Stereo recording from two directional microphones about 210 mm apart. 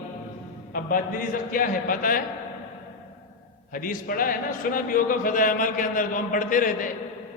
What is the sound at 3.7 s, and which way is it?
A man's voice, 40° left (ahead or behind).